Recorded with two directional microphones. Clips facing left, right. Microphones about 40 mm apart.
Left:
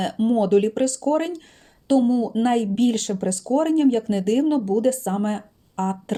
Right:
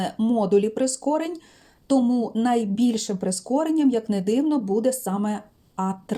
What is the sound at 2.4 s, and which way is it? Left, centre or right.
Speech, left.